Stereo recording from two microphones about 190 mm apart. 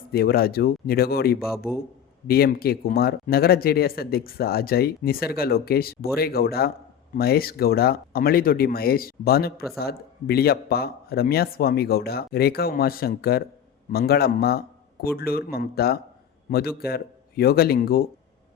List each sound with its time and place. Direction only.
0.1 s speech: 55° left (ahead or behind)
1.5 s a man's voice: centre (ahead or behind)
2.2 s speech: 55° left (ahead or behind)